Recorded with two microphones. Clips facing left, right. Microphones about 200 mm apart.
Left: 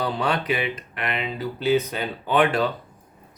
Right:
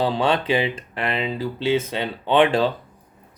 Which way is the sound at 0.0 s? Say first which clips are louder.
Right 4 dB; 25° right (ahead or behind).